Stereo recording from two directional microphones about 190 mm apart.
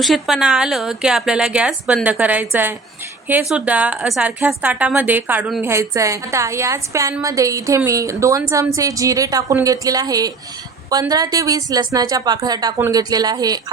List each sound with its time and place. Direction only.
0.0 s a woman's voice: centre (ahead or behind); by 13.6 s 20° right (ahead or behind)